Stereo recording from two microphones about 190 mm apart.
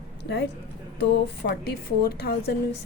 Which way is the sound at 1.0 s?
55° left (ahead or behind).